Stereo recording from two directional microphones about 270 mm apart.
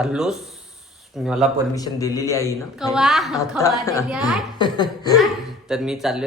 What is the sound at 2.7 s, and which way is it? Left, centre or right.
Speech, centre.